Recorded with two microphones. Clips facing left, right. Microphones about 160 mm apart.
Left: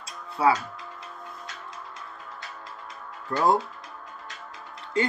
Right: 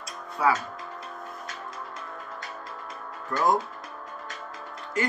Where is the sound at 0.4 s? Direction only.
30° left (ahead or behind).